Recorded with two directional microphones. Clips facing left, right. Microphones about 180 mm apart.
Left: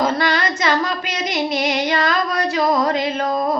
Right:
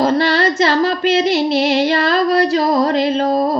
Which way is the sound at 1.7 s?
30° right (ahead or behind).